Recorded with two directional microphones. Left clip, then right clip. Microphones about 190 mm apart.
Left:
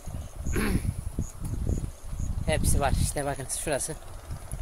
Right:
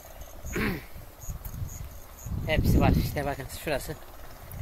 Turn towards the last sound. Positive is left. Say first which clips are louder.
# left 1 dB
turn(degrees=10)  # may be behind; listen again after turning